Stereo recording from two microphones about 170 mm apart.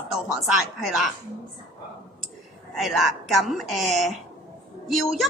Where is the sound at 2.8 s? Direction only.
Centre (ahead or behind).